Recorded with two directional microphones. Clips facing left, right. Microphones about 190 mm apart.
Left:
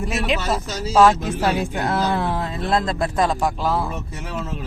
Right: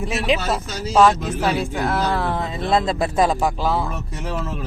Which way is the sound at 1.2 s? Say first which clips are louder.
Even; 15° left (ahead or behind).